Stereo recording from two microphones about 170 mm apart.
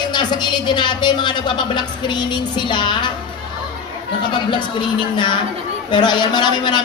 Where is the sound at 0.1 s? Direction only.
25° left (ahead or behind).